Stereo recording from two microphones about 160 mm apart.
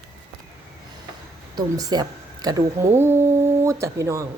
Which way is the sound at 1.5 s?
25° right (ahead or behind).